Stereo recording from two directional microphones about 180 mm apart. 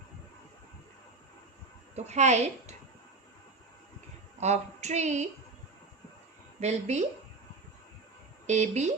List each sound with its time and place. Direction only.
2.0 s a woman's voice: 40° right (ahead or behind)
4.4 s a woman's voice: 40° right (ahead or behind)
6.6 s a woman's voice: 40° right (ahead or behind)
8.4 s a woman's voice: 40° right (ahead or behind)